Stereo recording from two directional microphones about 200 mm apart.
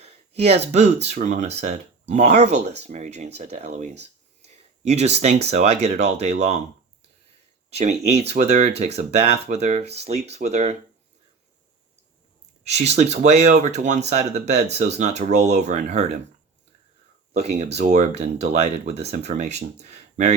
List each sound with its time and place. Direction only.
0.0 s speech: 30° right (ahead or behind)
7.8 s speech: 30° right (ahead or behind)
12.6 s speech: 35° right (ahead or behind)
17.3 s speech: 35° right (ahead or behind)